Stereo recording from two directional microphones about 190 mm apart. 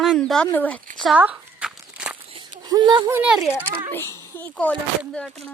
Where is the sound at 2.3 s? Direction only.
25° right (ahead or behind).